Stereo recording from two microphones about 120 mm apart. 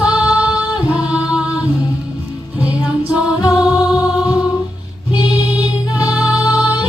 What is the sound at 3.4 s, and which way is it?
Music, 30° left (ahead or behind).